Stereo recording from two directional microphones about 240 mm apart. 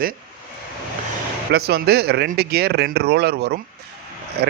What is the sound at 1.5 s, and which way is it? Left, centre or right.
Speech, right.